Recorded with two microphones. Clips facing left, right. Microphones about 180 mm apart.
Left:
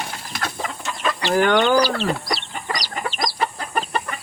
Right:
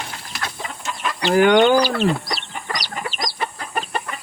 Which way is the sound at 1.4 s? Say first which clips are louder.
Right 4 dB; 15° right (ahead or behind).